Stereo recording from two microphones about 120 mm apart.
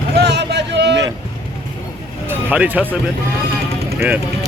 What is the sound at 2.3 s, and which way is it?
Speech, 15° right (ahead or behind).